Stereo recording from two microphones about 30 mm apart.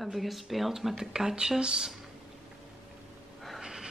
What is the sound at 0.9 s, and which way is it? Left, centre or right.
Speech, centre.